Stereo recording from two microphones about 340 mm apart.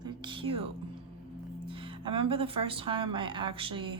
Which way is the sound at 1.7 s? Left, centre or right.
Centre.